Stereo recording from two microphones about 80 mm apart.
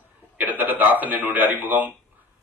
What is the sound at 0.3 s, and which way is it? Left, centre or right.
A man's voice, right.